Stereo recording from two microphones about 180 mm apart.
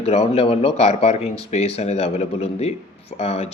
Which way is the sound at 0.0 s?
35° left (ahead or behind).